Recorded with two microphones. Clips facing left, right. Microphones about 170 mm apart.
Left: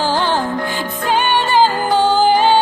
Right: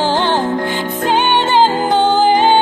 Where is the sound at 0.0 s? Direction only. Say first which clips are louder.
Right 2 dB; 20° right (ahead or behind).